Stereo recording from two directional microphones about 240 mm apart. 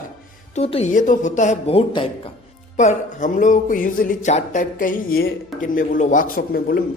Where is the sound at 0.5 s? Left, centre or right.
Left.